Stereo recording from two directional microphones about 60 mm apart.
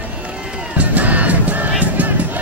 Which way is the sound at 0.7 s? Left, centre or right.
Right.